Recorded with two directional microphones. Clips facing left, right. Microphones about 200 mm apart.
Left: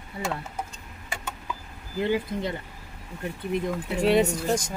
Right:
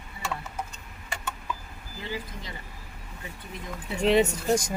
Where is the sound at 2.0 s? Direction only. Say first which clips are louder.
Left 11 dB; 60° left (ahead or behind).